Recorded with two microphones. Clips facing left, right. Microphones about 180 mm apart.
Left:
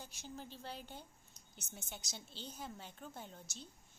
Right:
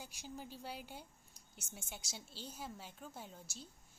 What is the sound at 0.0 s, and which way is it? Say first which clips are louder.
A woman's voice: right 1 dB; 10° right (ahead or behind).